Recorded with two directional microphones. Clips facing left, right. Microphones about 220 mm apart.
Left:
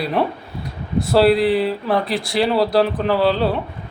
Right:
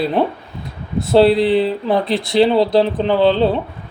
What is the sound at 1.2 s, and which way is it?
Speech, centre (ahead or behind).